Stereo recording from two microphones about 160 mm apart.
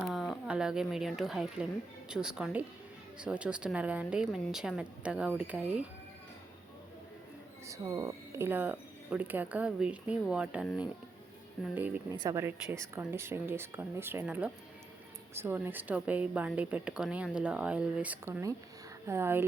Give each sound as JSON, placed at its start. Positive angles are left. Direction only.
{"t": 0.0, "sound": "a woman's voice", "side_deg": 0}
{"t": 7.7, "sound": "a woman's voice", "side_deg": -20}
{"t": 11.7, "sound": "a woman's voice", "side_deg": -10}